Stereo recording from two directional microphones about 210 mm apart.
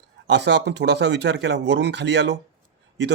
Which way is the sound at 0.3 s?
55° right (ahead or behind).